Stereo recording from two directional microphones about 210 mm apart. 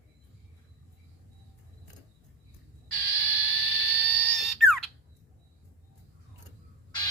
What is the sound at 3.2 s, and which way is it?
Frog, 10° left (ahead or behind).